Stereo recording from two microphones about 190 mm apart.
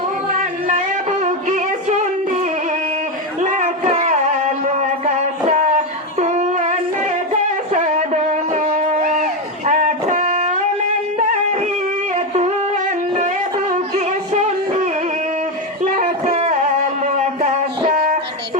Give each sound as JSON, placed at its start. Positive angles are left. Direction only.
{"t": 1.2, "sound": "music", "side_deg": -40}
{"t": 3.4, "sound": "a sound", "side_deg": -40}
{"t": 7.7, "sound": "music", "side_deg": -35}
{"t": 12.3, "sound": "singing", "side_deg": -35}
{"t": 13.2, "sound": "music", "side_deg": -40}
{"t": 15.8, "sound": "music", "side_deg": -40}